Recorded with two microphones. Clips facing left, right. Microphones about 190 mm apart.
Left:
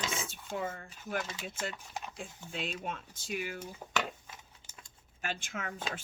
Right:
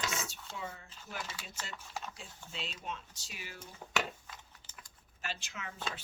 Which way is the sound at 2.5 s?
55° left (ahead or behind).